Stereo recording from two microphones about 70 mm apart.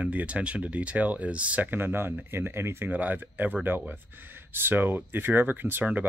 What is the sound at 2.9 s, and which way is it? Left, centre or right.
Speech, right.